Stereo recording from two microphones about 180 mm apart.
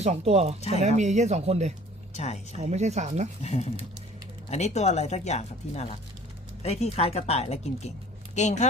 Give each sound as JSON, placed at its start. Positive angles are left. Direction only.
{"t": 0.0, "sound": "speech", "side_deg": -35}
{"t": 2.1, "sound": "speech", "side_deg": 40}
{"t": 2.6, "sound": "speech", "side_deg": -40}
{"t": 3.4, "sound": "speech", "side_deg": 35}